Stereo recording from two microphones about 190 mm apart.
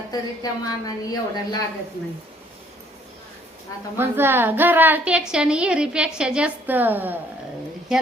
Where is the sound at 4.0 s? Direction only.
10° right (ahead or behind).